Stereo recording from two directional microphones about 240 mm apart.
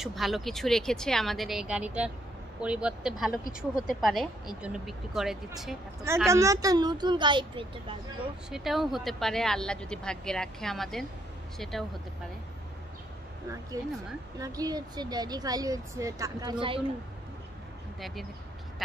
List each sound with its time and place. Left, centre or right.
0.0 s speech: centre
6.2 s speech: centre
8.5 s speech: centre
14.4 s speech: centre